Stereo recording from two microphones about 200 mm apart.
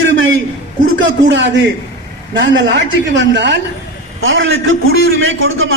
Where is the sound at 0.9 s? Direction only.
65° right (ahead or behind).